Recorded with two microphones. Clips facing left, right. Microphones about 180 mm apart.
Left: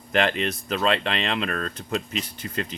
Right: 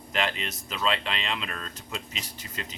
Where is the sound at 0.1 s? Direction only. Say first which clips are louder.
Left 7 dB; 55° left (ahead or behind).